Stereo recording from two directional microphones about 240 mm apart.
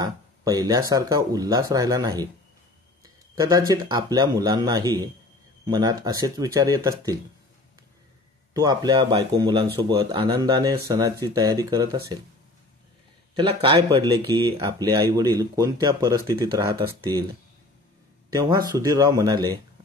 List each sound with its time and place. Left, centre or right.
0.0 s speech: centre
8.5 s speech: centre
13.4 s speech: right
18.3 s speech: centre